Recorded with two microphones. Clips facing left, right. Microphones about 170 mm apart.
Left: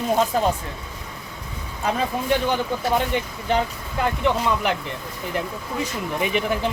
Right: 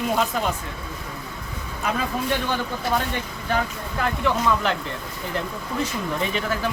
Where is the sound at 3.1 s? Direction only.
20° left (ahead or behind).